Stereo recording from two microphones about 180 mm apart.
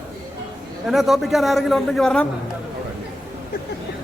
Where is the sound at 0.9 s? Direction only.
Centre (ahead or behind).